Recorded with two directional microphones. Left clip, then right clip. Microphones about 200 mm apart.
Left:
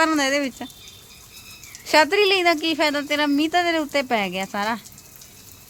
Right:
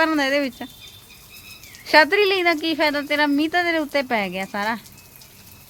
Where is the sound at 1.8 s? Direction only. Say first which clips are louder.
Right 2 dB; centre (ahead or behind).